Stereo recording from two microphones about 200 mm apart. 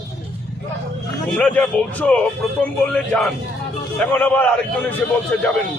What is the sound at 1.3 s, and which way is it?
A man's voice, 5° left (ahead or behind).